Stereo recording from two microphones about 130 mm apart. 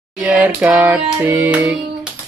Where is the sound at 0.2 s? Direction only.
10° right (ahead or behind).